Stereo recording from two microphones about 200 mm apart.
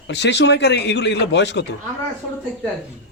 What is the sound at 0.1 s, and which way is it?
A man's voice, 60° left (ahead or behind).